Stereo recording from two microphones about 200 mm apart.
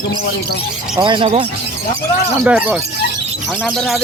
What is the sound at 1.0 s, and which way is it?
Speech, 25° right (ahead or behind).